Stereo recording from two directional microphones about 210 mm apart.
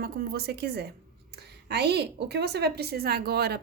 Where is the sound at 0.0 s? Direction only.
45° right (ahead or behind).